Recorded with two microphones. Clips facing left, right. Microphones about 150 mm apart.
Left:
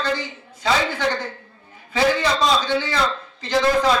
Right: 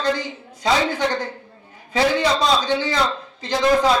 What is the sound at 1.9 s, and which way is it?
Speech, 15° right (ahead or behind).